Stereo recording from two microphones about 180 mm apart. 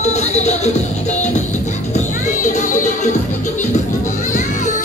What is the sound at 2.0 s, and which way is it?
Music, 45° left (ahead or behind).